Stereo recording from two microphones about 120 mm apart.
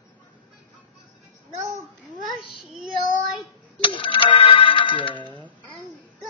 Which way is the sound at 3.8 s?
45° left (ahead or behind).